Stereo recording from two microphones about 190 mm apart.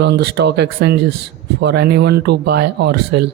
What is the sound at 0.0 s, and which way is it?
Speech, 65° right (ahead or behind).